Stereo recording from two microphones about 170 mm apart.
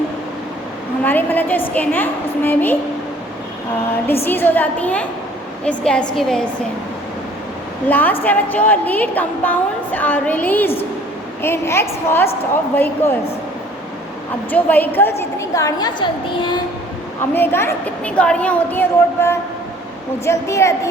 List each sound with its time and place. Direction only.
1.0 s a woman's voice: 10° left (ahead or behind)
4.0 s a woman's voice: 15° left (ahead or behind)
7.9 s a woman's voice: 10° left (ahead or behind)
14.5 s a woman's voice: 10° left (ahead or behind); by 16.6 s 25° left (ahead or behind)
17.3 s a woman's voice: 15° left (ahead or behind)